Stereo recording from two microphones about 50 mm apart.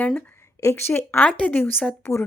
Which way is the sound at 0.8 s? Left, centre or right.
Left.